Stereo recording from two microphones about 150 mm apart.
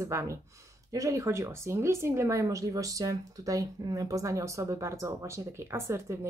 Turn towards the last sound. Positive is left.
turn(degrees=-20)  # may be behind; listen again after turning